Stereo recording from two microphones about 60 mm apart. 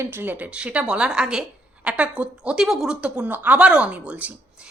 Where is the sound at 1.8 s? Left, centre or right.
Right.